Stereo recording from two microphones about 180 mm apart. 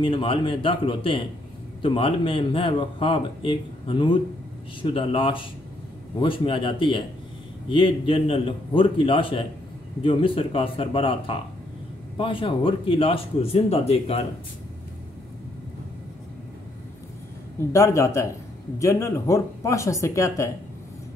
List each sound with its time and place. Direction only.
0.0 s speech: 30° left (ahead or behind)
17.6 s speech: 15° left (ahead or behind)